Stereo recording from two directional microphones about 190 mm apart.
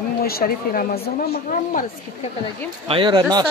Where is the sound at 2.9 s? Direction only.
25° right (ahead or behind).